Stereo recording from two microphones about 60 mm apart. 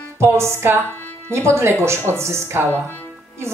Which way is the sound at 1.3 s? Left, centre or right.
Right.